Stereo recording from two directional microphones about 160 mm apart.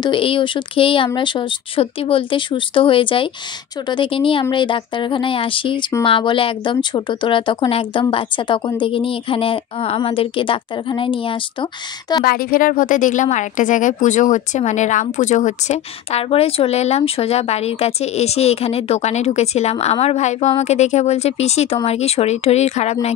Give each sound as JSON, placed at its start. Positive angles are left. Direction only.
{"t": 0.0, "sound": "speech", "side_deg": 30}
{"t": 12.3, "sound": "speech", "side_deg": 65}